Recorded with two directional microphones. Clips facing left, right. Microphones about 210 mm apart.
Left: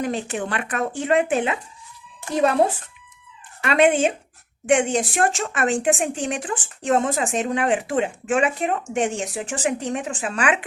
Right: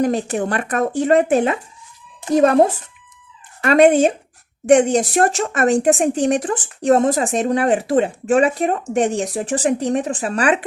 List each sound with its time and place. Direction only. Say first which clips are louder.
0.0 s speech: right 7 dB; 40° right (ahead or behind)